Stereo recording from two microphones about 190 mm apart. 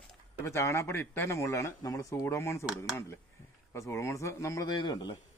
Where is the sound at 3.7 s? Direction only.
15° left (ahead or behind).